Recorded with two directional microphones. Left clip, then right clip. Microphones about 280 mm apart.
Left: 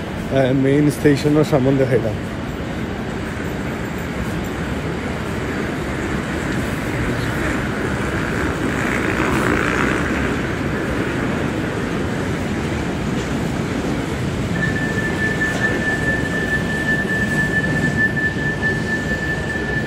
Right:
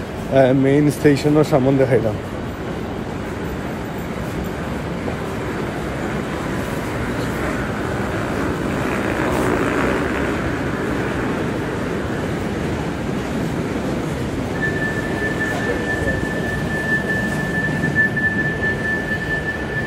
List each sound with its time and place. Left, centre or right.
0.3 s speech: centre